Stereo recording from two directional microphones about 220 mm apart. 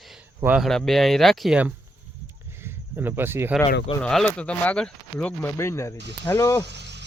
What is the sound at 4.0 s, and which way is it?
Speech, 5° left (ahead or behind).